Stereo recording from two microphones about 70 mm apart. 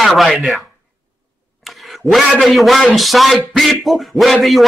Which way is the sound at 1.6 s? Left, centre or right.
Centre.